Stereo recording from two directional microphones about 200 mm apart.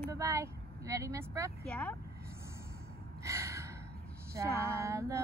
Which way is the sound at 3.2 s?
15° right (ahead or behind).